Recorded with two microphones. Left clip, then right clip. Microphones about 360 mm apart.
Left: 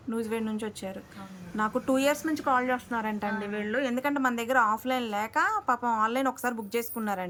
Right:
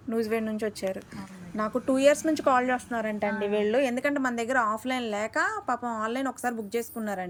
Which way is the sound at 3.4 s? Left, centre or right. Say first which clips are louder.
Right 7 dB; right.